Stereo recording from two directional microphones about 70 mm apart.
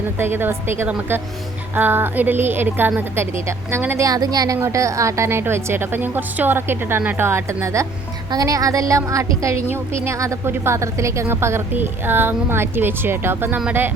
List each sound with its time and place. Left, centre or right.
0.2 s a woman's voice: right
4.0 s a woman's voice: right
4.6 s a woman's voice: right
8.3 s a woman's voice: right